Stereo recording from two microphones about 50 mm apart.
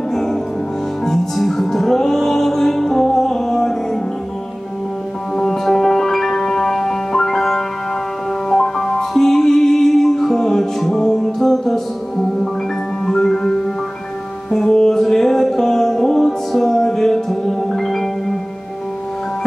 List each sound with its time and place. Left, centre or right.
0.1 s music: centre
5.3 s music: centre